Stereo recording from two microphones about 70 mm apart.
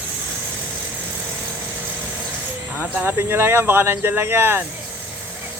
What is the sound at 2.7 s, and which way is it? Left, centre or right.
Speech, right.